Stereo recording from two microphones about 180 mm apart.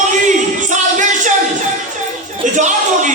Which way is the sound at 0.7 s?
45° right (ahead or behind).